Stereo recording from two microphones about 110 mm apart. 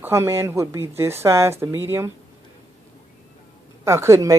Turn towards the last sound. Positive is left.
turn(degrees=-25)  # may be behind; listen again after turning